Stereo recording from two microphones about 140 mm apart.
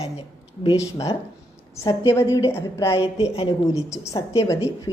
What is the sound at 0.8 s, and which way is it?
Speech, 25° left (ahead or behind).